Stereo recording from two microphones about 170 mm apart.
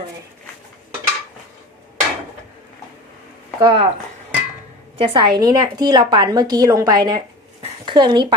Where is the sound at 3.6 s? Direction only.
30° right (ahead or behind).